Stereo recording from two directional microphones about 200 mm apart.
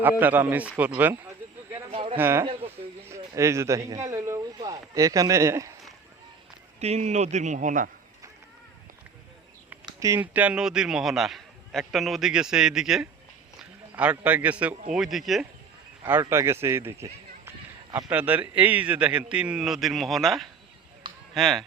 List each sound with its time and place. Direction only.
0.0 s a man's voice: 10° right (ahead or behind)
1.9 s a sound: 30° right (ahead or behind)
2.1 s a man's voice: 10° right (ahead or behind)
2.4 s speech: 30° right (ahead or behind)
3.1 s speech: 15° right (ahead or behind)
6.7 s speech: 35° right (ahead or behind)
9.8 s a man's voice: 15° right (ahead or behind)
16.0 s a man's voice: 10° right (ahead or behind)